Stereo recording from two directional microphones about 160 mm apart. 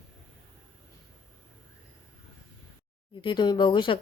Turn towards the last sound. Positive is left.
turn(degrees=30)  # may be behind; listen again after turning